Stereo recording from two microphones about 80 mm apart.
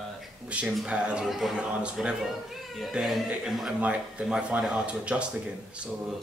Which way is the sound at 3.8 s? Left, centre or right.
Centre.